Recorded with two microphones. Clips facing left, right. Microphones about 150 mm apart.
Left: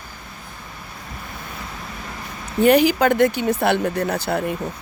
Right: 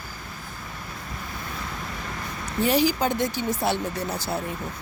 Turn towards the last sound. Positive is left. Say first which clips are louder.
# left 7 dB
turn(degrees=65)  # may be behind; listen again after turning